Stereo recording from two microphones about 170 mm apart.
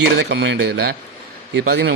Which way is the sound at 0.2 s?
90° right.